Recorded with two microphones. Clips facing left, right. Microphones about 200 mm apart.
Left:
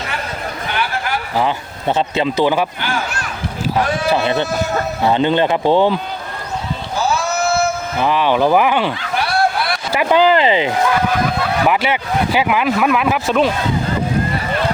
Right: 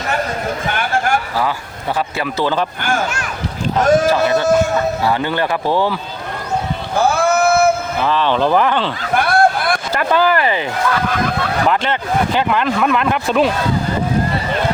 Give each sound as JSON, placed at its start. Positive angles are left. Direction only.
{"t": 0.7, "sound": "a sound", "side_deg": -50}
{"t": 2.1, "sound": "speech", "side_deg": 20}
{"t": 3.8, "sound": "speech", "side_deg": -45}
{"t": 5.0, "sound": "speech", "side_deg": 20}
{"t": 6.9, "sound": "a sound", "side_deg": -55}
{"t": 8.0, "sound": "speech", "side_deg": 15}
{"t": 9.1, "sound": "a sound", "side_deg": -50}
{"t": 9.9, "sound": "speech", "side_deg": 15}
{"t": 11.7, "sound": "speech", "side_deg": 10}